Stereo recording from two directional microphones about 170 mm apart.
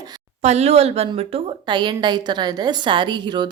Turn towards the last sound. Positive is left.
turn(degrees=-25)  # may be behind; listen again after turning